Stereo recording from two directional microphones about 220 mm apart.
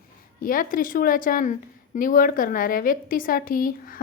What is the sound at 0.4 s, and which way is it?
A woman's voice, 40° left (ahead or behind).